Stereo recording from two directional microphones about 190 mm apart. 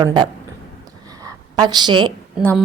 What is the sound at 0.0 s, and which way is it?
Speech, 25° right (ahead or behind).